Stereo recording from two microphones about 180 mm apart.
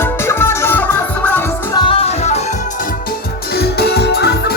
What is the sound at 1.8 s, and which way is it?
Music, 30° left (ahead or behind).